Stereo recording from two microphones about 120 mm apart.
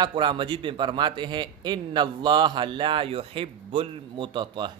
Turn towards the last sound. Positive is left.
turn(degrees=-40)  # may be behind; listen again after turning